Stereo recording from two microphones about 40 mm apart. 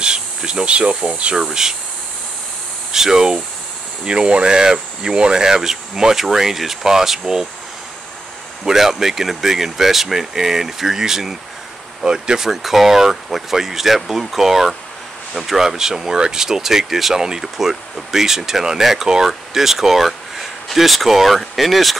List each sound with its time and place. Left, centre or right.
0.0 s a sound: right
1.3 s speech: centre
2.9 s speech: centre
4.0 s speech: right
8.6 s speech: centre
12.4 s speech: centre